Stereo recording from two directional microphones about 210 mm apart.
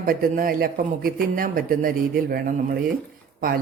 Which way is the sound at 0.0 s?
40° right (ahead or behind).